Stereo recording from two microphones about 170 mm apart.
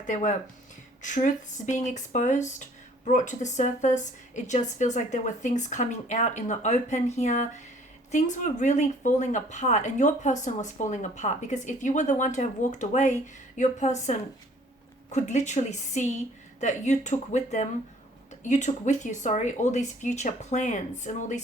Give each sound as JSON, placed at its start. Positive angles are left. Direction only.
{"t": 0.1, "sound": "speech", "side_deg": 50}